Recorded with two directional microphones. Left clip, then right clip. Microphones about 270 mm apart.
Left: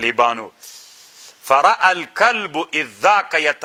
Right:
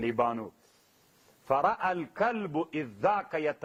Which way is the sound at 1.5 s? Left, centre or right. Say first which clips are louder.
Left 14 dB; centre.